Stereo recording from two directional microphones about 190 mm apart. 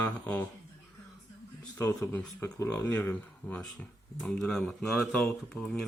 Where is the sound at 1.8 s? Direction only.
10° left (ahead or behind).